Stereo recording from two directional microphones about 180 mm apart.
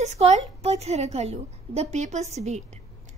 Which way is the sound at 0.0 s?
40° right (ahead or behind).